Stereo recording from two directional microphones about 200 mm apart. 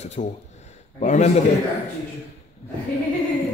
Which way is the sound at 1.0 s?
35° left (ahead or behind).